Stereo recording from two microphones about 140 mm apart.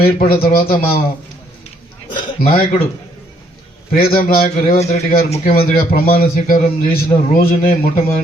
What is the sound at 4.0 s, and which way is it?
Speech, 90° left.